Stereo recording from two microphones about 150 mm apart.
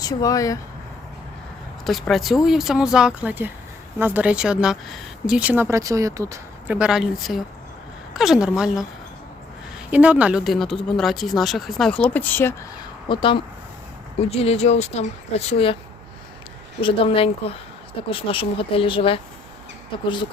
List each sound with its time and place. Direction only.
0.0 s speech: 25° left (ahead or behind)
1.8 s speech: centre (ahead or behind); by 6.7 s 20° right (ahead or behind)
6.7 s speech: 5° right (ahead or behind); by 12.5 s 15° left (ahead or behind)
13.1 s speech: 35° left (ahead or behind)
16.8 s speech: 40° left (ahead or behind)